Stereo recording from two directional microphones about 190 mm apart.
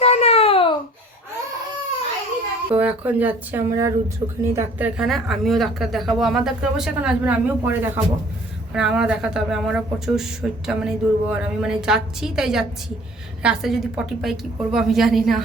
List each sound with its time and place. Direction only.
0.0 s a sound: 35° left (ahead or behind)
2.6 s speech: 10° right (ahead or behind)
4.2 s speech: 25° right (ahead or behind)
4.5 s speech: 5° right (ahead or behind)